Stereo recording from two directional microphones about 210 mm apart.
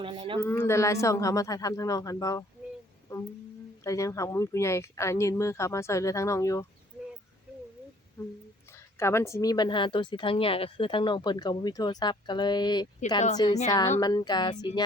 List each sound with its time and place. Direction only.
0.0 s speech: 25° right (ahead or behind)
0.4 s speech: 10° left (ahead or behind)
3.8 s speech: 15° left (ahead or behind)
9.0 s speech: 10° left (ahead or behind)